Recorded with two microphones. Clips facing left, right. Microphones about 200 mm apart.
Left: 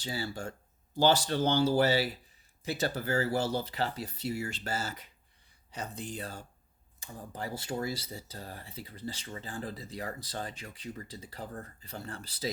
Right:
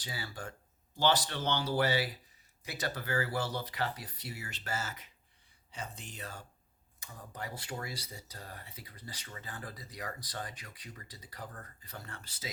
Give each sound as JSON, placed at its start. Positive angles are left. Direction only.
{"t": 0.0, "sound": "speech", "side_deg": 30}